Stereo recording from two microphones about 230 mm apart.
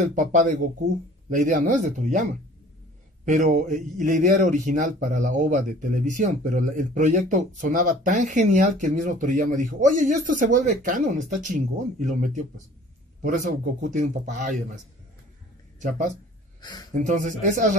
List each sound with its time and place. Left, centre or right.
0.1 s a man's voice: right
16.6 s speech: centre
16.9 s a man's voice: right